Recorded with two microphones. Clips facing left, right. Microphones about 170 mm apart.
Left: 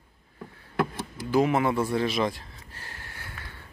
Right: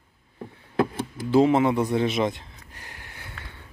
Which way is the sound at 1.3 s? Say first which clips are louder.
Right 4 dB; 25° right (ahead or behind).